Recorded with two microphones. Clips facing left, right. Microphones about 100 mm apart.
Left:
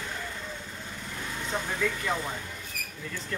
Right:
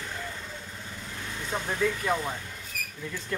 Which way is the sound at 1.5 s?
5° right (ahead or behind).